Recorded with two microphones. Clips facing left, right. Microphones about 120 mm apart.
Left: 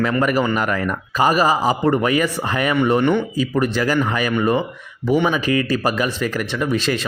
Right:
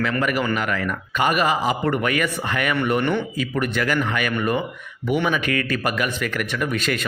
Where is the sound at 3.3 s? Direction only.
30° left (ahead or behind).